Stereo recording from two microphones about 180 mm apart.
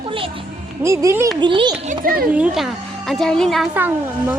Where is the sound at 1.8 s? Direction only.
45° right (ahead or behind).